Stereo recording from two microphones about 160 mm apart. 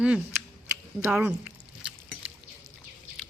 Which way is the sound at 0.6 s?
10° right (ahead or behind).